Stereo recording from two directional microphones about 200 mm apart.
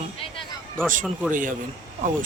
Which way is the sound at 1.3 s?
40° right (ahead or behind).